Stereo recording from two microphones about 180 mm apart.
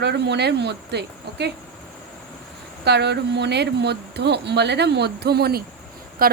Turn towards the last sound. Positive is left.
turn(degrees=-55)  # may be behind; listen again after turning